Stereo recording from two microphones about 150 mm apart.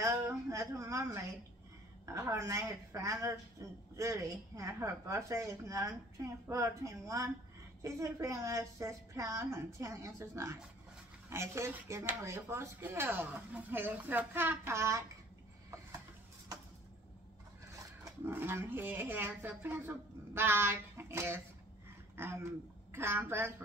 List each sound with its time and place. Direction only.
0.0 s a sound: 20° right (ahead or behind)
2.0 s speech: 20° right (ahead or behind)
18.0 s speech: 15° right (ahead or behind)